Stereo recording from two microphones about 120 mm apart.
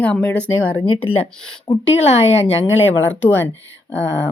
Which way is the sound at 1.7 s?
45° left (ahead or behind).